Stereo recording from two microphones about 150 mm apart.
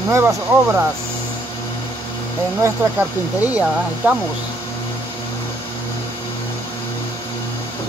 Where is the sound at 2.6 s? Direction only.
10° right (ahead or behind).